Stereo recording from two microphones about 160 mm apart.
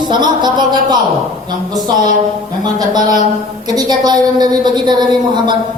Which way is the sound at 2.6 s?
25° right (ahead or behind).